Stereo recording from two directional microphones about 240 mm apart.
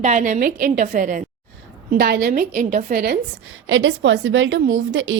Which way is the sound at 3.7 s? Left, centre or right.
Right.